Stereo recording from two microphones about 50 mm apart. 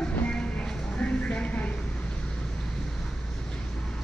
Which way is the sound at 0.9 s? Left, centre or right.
Centre.